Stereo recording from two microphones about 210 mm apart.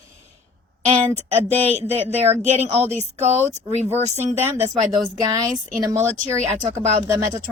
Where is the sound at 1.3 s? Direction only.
30° right (ahead or behind).